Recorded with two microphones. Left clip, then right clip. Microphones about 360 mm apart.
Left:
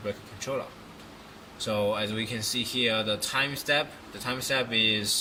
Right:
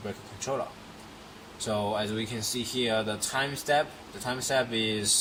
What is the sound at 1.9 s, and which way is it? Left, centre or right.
Speech, centre.